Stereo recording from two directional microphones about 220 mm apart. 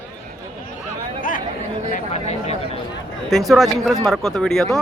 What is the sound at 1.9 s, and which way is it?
Speech, 30° left (ahead or behind).